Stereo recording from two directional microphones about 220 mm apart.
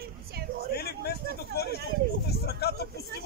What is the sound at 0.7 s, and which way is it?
Speech, 45° left (ahead or behind).